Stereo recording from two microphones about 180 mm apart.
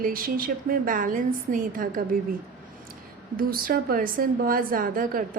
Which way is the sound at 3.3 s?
55° right (ahead or behind).